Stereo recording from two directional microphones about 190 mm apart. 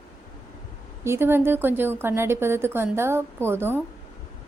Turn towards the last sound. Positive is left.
turn(degrees=-10)  # may be behind; listen again after turning